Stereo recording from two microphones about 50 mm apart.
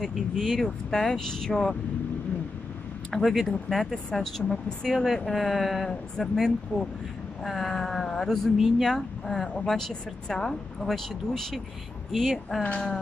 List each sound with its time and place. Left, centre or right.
0.0 s speech: centre
3.1 s speech: centre
8.5 s speech: centre
8.8 s speech: centre